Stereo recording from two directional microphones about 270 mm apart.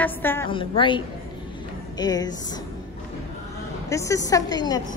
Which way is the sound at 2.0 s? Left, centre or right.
Centre.